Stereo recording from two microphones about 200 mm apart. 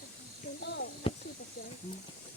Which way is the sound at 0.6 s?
60° left (ahead or behind).